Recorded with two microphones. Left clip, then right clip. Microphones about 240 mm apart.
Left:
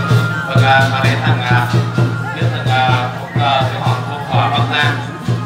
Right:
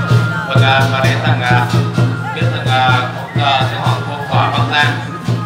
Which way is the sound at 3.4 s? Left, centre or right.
Right.